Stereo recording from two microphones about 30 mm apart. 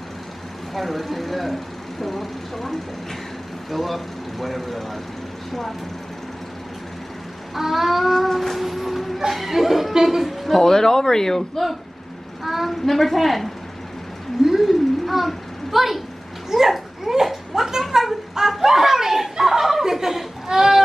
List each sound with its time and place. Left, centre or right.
0.7 s speech: centre
7.5 s speech: centre
8.4 s train: centre
9.3 s speech: centre
10.6 s a man's voice: centre
12.4 s child singing: centre
12.8 s speech: centre
14.4 s a sound: centre
15.0 s a sound: centre
18.6 s chuckle: centre
20.4 s a sound: centre